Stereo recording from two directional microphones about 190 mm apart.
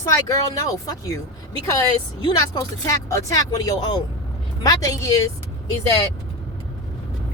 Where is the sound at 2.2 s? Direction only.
20° left (ahead or behind).